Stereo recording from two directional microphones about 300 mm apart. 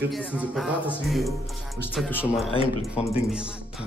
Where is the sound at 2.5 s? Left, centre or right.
Centre.